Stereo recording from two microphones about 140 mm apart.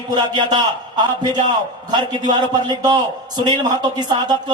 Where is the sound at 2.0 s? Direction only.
30° right (ahead or behind).